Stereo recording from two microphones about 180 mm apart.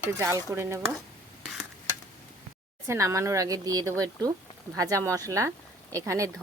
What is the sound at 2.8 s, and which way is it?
Speech, 15° right (ahead or behind).